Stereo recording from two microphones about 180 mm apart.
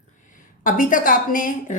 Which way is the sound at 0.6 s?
50° left (ahead or behind).